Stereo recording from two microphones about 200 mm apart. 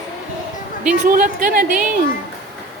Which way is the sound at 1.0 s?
40° right (ahead or behind).